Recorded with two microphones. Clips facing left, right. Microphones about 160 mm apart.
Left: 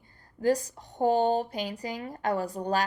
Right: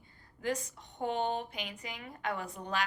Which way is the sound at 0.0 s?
40° left (ahead or behind).